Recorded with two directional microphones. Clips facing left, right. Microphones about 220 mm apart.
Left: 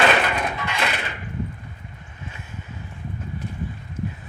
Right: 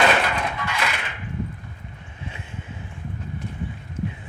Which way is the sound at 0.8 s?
30° left (ahead or behind).